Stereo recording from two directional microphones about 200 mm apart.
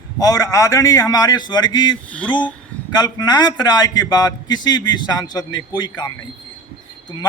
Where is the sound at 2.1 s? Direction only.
5° left (ahead or behind).